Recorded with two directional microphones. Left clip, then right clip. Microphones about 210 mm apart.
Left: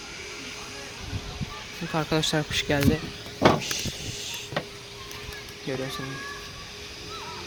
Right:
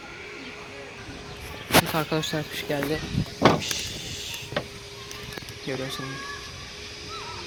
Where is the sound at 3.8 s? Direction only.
10° left (ahead or behind).